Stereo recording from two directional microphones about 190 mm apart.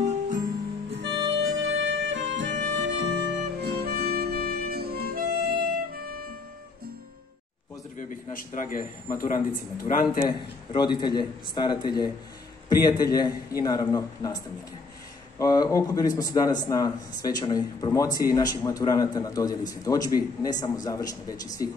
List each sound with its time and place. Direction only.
0.0 s music: 40° right (ahead or behind)
1.0 s music: 75° right (ahead or behind); by 6.1 s 55° right (ahead or behind)
8.4 s a man's voice: 45° left (ahead or behind)
9.9 s speech: 40° left (ahead or behind)
10.7 s a man's voice: 25° left (ahead or behind)